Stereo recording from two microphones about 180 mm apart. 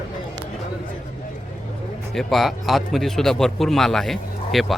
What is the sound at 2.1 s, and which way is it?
Speech, centre (ahead or behind).